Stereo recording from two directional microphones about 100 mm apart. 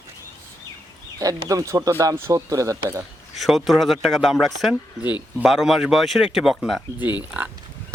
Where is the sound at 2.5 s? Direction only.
35° right (ahead or behind).